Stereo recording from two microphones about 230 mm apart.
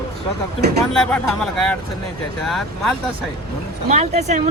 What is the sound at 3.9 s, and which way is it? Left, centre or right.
Speech, right.